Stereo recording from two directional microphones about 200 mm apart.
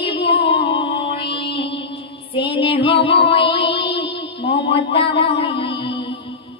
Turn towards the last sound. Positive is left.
turn(degrees=25)  # may be behind; listen again after turning